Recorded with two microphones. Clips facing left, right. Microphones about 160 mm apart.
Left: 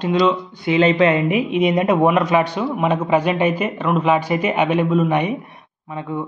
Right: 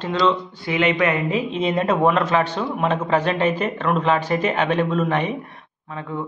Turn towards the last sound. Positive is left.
turn(degrees=15)  # may be behind; listen again after turning